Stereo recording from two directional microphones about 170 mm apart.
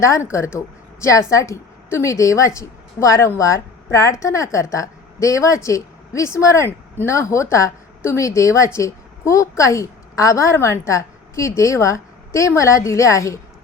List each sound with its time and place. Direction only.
0.0 s a woman's voice: 15° left (ahead or behind)